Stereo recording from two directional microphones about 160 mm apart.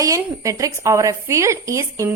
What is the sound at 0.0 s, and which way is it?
A woman's voice, 20° right (ahead or behind).